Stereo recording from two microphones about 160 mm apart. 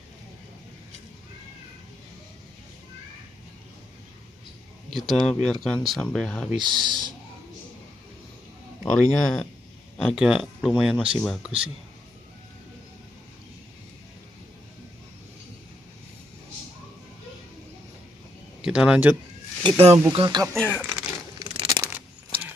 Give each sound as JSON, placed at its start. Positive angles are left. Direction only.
{"t": 4.9, "sound": "speech", "side_deg": 0}
{"t": 6.9, "sound": "speech", "side_deg": -25}
{"t": 8.9, "sound": "speech", "side_deg": 5}
{"t": 18.6, "sound": "speech", "side_deg": -5}
{"t": 19.6, "sound": "speech", "side_deg": -35}
{"t": 20.5, "sound": "speech", "side_deg": 10}
{"t": 21.5, "sound": "a sound", "side_deg": -30}
{"t": 21.8, "sound": "coin", "side_deg": -10}